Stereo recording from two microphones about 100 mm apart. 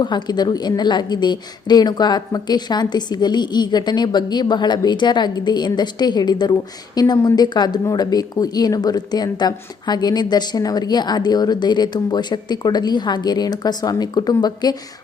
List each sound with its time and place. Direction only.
0.0 s speech: 45° left (ahead or behind)